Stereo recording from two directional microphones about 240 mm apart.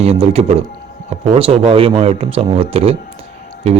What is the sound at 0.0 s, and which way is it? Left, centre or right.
A man's voice, right.